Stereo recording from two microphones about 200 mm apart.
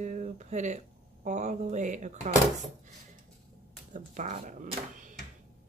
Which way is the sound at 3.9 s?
40° right (ahead or behind).